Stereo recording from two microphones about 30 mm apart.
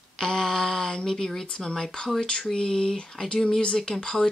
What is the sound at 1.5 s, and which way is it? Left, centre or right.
Speech, left.